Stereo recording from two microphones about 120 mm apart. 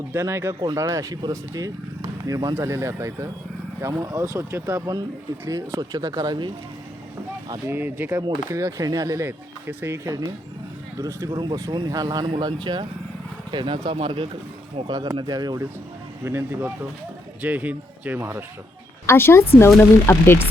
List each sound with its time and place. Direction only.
0.1 s speech: 20° right (ahead or behind)
7.7 s speech: 15° right (ahead or behind); by 15.6 s 35° right (ahead or behind)
16.2 s speech: 20° right (ahead or behind)
19.0 s speech: 20° left (ahead or behind)